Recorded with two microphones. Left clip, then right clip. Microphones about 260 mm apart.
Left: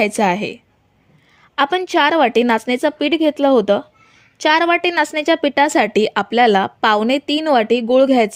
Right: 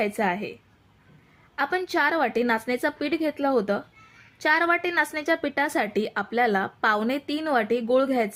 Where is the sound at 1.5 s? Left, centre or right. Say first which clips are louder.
Left 9 dB; left.